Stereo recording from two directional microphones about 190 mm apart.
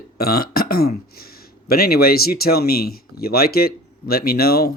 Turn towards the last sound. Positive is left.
turn(degrees=55)  # may be behind; listen again after turning